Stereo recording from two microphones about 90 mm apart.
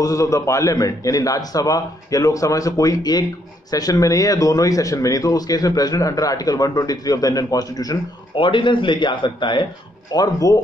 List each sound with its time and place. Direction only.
0.0 s speech: 35° left (ahead or behind)
8.4 s a man's voice: 65° left (ahead or behind)
10.1 s speech: 45° left (ahead or behind)